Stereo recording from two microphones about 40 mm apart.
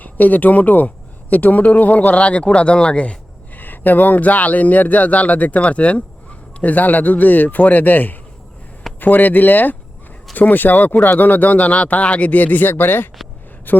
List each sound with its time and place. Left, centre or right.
0.0 s speech: left
3.5 s speech: left